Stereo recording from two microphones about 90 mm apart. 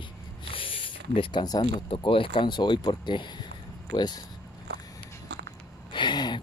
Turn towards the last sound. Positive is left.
turn(degrees=55)  # may be behind; listen again after turning